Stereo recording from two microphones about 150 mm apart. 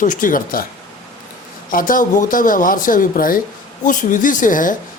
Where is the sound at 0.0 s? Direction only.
60° left (ahead or behind).